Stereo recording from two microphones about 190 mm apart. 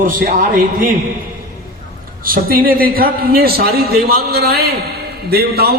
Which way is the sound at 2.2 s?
50° right (ahead or behind).